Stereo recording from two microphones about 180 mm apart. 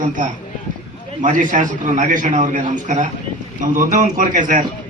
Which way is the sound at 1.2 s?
45° right (ahead or behind).